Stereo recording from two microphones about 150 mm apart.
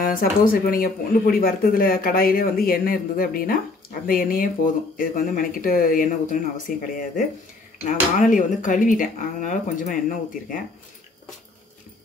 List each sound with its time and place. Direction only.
0.2 s speech: 70° left (ahead or behind)